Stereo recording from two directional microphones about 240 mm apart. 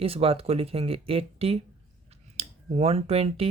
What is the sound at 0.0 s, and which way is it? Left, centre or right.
Speech, right.